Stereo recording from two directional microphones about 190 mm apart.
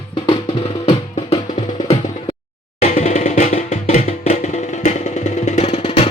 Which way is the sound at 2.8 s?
35° left (ahead or behind).